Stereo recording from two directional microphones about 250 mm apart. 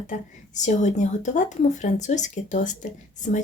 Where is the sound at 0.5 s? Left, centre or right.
Left.